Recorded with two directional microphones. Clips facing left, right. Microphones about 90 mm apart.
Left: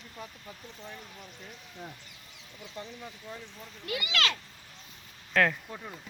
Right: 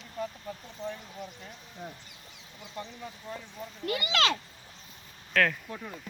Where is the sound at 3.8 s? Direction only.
40° right (ahead or behind).